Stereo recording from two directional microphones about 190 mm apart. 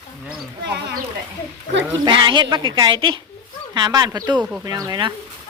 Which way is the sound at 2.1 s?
25° right (ahead or behind).